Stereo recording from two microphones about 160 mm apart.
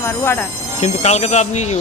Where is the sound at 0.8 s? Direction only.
45° left (ahead or behind).